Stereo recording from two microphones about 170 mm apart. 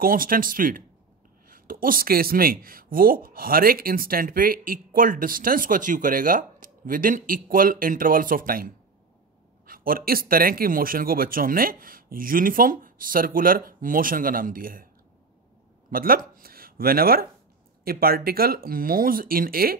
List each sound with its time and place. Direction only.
0.0 s speech: 55° right (ahead or behind)
15.9 s speech: 55° right (ahead or behind)